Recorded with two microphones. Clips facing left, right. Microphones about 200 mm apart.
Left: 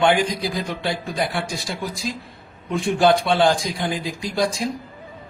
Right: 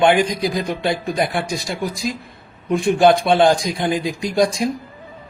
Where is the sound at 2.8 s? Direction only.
20° right (ahead or behind).